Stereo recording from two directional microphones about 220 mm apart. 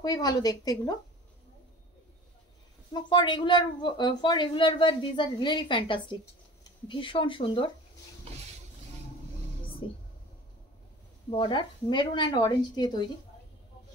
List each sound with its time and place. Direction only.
0.0 s a woman's voice: 20° left (ahead or behind)
2.9 s speech: 20° left (ahead or behind)
9.8 s speech: 20° left (ahead or behind)
11.2 s speech: 25° left (ahead or behind)